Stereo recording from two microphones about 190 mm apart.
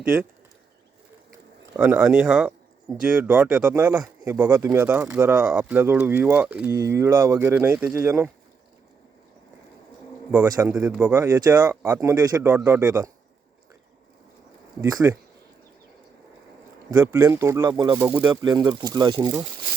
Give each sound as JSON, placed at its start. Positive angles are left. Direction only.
{"t": 1.7, "sound": "speech", "side_deg": -10}
{"t": 10.3, "sound": "speech", "side_deg": -10}
{"t": 14.8, "sound": "speech", "side_deg": -15}
{"t": 16.9, "sound": "speech", "side_deg": -10}